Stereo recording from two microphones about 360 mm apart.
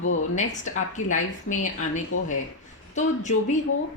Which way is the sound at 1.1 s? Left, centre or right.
Left.